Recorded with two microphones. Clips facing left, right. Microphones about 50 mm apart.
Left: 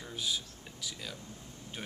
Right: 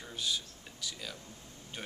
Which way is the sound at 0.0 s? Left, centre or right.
Centre.